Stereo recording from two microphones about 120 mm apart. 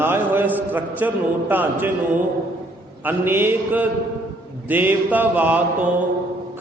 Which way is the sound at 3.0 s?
20° right (ahead or behind).